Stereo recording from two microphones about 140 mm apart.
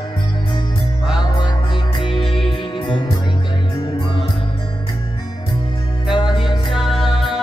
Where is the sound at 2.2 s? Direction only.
Centre (ahead or behind).